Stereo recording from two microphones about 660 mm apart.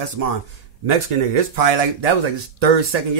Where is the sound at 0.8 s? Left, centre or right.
Right.